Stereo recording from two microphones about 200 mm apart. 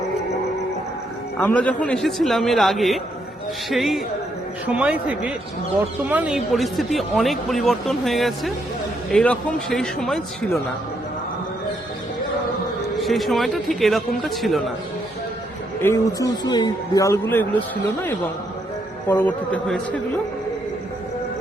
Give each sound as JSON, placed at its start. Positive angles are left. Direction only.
{"t": 1.4, "sound": "a man's voice", "side_deg": 5}
{"t": 13.0, "sound": "speech", "side_deg": 0}
{"t": 15.8, "sound": "a man's voice", "side_deg": 15}
{"t": 19.0, "sound": "speech", "side_deg": 10}